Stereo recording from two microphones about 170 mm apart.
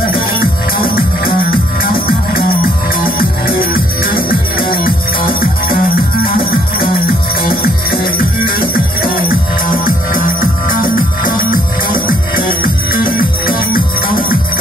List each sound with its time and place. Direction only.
0.3 s music: 60° left (ahead or behind)